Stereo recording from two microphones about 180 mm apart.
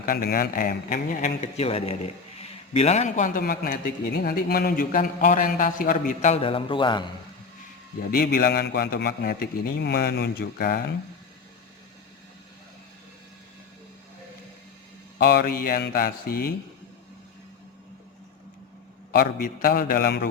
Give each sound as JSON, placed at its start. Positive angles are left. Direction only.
{"t": 0.0, "sound": "a man's voice", "side_deg": 55}
{"t": 1.5, "sound": "a man's voice", "side_deg": 35}
{"t": 8.1, "sound": "a man's voice", "side_deg": 55}
{"t": 15.2, "sound": "a man's voice", "side_deg": 65}
{"t": 19.1, "sound": "a man's voice", "side_deg": 55}